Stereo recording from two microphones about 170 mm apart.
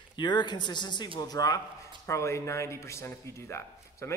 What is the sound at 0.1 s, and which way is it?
Speech, 25° left (ahead or behind).